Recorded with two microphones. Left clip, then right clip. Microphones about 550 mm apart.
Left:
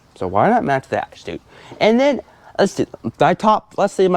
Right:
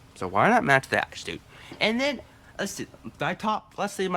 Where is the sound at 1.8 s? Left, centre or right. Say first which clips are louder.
Left 11 dB; left.